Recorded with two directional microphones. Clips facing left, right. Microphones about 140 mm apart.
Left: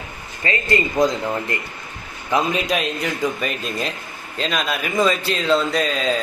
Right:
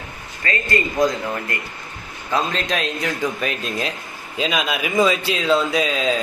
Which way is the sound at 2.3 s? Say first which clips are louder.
Left 2 dB; 10° left (ahead or behind).